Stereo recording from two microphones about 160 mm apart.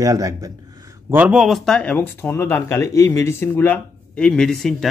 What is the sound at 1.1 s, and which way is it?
Speech, 10° right (ahead or behind).